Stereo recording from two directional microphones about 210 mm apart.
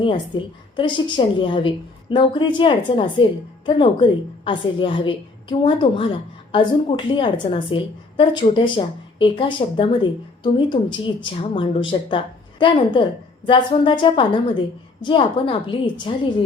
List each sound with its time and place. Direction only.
0.0 s a woman's voice: 25° left (ahead or behind)